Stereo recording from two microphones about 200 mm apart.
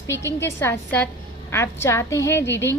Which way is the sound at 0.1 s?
15° left (ahead or behind).